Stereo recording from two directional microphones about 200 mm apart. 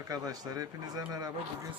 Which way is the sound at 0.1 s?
20° right (ahead or behind).